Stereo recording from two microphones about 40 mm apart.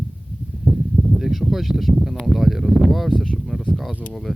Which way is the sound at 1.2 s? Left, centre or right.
Centre.